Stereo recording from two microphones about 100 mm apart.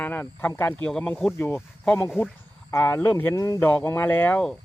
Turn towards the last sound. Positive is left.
turn(degrees=20)  # may be behind; listen again after turning